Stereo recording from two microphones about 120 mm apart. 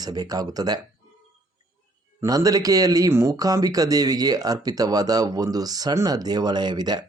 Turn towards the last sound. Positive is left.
turn(degrees=-35)  # may be behind; listen again after turning